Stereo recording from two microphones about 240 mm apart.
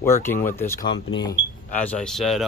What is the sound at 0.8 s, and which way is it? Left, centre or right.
Speech, centre.